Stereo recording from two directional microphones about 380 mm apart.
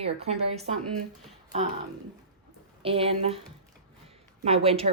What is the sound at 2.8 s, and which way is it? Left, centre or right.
Speech, centre.